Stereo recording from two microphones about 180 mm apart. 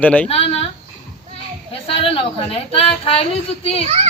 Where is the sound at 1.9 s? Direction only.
30° left (ahead or behind).